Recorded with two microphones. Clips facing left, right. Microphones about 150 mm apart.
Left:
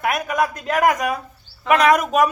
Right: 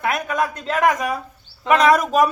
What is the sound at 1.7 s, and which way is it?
Speech, 30° right (ahead or behind).